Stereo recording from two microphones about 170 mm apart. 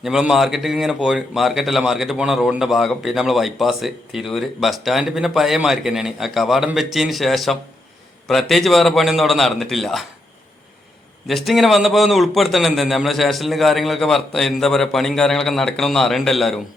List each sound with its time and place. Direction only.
0.0 s speech: 5° right (ahead or behind)
11.3 s speech: centre (ahead or behind)